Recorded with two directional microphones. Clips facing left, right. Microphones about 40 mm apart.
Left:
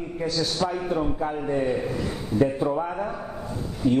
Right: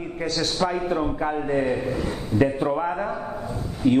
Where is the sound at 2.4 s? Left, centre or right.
Right.